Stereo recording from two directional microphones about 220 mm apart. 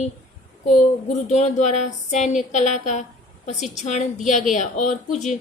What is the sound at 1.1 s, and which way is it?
A woman's voice, 30° left (ahead or behind).